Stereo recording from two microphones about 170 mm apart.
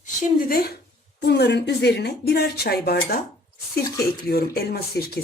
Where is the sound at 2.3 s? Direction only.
65° left (ahead or behind).